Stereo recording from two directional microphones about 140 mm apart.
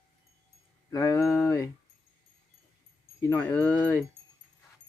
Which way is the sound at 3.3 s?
15° left (ahead or behind).